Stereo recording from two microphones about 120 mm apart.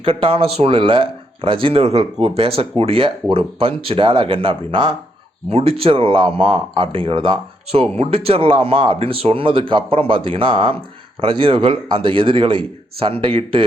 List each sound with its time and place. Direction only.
0.0 s speech: 45° right (ahead or behind)
5.5 s speech: 55° right (ahead or behind)